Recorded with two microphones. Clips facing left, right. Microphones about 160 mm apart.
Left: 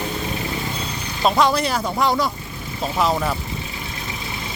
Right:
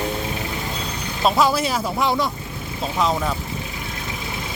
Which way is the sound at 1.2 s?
Centre (ahead or behind).